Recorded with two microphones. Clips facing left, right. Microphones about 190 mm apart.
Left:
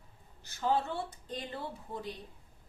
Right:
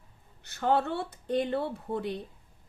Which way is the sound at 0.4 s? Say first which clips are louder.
Right 4 dB; 65° right (ahead or behind).